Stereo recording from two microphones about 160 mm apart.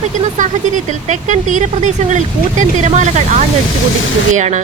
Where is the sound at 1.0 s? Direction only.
50° right (ahead or behind).